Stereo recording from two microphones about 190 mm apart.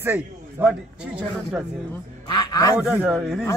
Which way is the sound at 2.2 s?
20° left (ahead or behind).